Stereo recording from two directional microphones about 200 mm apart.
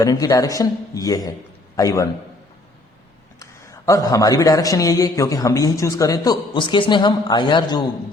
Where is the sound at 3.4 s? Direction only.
15° left (ahead or behind).